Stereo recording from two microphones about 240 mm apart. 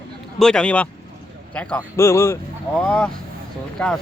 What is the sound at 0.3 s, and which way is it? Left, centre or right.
Speech, centre.